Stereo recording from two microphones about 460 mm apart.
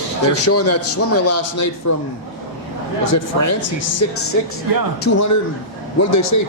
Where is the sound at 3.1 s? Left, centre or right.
Left.